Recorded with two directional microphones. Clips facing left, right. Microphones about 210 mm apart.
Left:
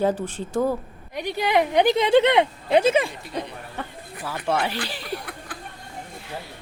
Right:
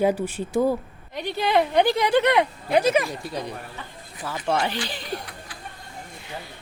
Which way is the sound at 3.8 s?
60° left (ahead or behind).